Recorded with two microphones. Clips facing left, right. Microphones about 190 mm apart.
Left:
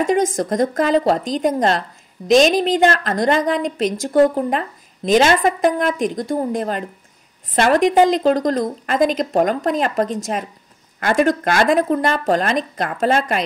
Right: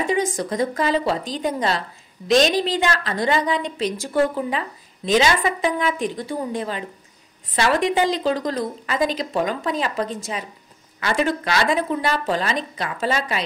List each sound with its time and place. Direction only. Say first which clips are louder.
0.0 s speech: left 5 dB; 45° left (ahead or behind)